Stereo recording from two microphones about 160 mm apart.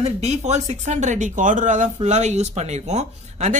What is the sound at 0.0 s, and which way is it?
Speech, 45° right (ahead or behind).